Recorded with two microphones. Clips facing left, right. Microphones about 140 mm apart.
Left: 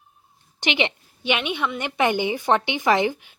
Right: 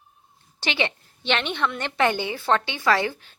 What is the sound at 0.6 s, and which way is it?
A woman's voice, 20° left (ahead or behind).